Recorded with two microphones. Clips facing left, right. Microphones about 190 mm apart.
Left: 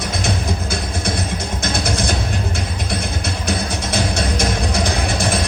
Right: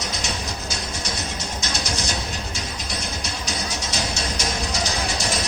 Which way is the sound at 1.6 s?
55° left (ahead or behind).